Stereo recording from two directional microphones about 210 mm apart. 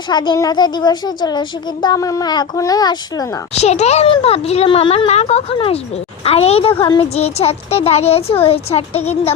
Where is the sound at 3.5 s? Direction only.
30° left (ahead or behind).